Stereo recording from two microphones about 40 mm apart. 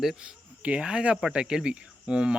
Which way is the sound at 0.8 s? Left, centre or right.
Right.